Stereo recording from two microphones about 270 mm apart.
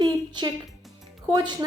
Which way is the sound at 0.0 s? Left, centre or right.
Centre.